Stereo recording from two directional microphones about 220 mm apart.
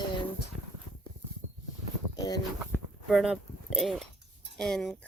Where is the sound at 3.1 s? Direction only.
Centre (ahead or behind).